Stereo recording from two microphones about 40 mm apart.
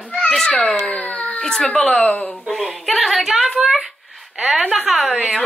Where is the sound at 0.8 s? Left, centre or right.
Left.